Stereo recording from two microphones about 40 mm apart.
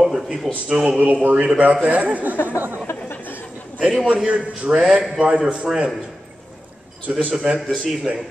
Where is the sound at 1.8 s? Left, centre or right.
Right.